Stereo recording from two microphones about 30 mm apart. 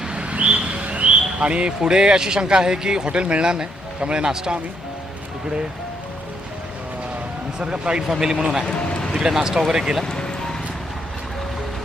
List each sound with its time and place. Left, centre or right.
0.0 s bird: right
1.8 s a man's voice: right
3.1 s a man's voice: right
7.6 s speech: right
8.2 s speech: centre
8.6 s a man's voice: left
9.3 s speech: centre
10.0 s music: left